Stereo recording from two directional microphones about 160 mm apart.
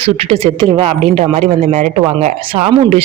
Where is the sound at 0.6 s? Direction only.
40° right (ahead or behind).